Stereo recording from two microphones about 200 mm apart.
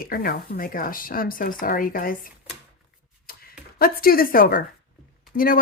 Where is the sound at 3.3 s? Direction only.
50° left (ahead or behind).